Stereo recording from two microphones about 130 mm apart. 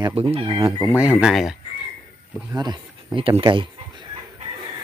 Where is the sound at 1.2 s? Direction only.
Centre (ahead or behind).